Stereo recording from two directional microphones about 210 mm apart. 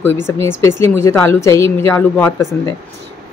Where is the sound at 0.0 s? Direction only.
10° left (ahead or behind).